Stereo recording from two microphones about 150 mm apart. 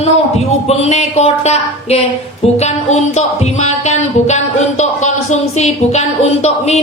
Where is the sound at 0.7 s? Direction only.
45° left (ahead or behind).